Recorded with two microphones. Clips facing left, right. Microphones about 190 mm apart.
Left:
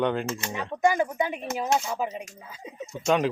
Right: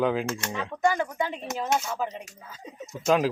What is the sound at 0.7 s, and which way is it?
Speech, 15° left (ahead or behind).